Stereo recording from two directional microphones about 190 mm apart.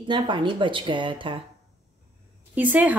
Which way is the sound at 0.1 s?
25° right (ahead or behind).